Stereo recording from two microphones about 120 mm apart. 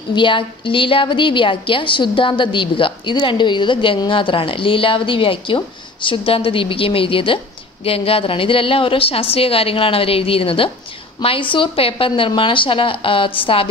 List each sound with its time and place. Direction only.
0.1 s a woman's voice: 40° left (ahead or behind)